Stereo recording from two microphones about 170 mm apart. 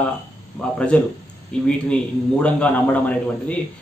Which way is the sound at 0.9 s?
5° left (ahead or behind).